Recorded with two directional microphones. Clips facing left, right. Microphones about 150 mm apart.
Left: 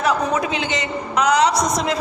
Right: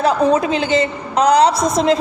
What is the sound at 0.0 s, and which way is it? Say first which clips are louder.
A woman's voice: right 5 dB; 30° right (ahead or behind).